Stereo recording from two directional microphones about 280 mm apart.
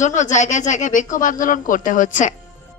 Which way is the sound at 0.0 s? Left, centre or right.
Left.